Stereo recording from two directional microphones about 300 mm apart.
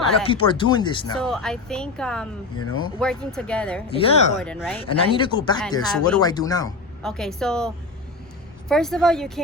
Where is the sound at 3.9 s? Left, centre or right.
Centre.